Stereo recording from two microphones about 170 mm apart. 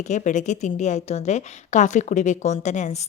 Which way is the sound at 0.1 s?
45° left (ahead or behind).